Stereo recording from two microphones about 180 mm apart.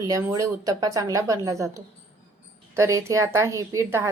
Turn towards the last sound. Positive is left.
turn(degrees=-15)  # may be behind; listen again after turning